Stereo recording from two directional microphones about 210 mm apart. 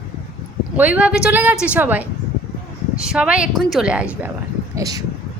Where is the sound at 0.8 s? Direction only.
5° right (ahead or behind).